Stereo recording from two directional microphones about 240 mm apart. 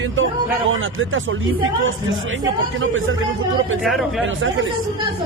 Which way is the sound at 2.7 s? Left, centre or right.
Right.